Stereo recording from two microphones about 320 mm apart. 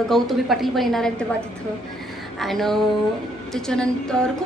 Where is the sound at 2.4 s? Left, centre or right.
Centre.